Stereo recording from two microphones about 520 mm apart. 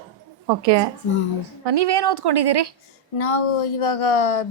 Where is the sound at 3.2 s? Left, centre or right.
Left.